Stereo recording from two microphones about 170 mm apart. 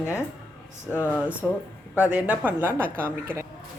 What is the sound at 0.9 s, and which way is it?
Speech, 15° left (ahead or behind).